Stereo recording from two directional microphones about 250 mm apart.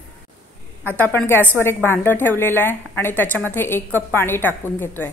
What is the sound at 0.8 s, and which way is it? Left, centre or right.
A woman's voice, centre.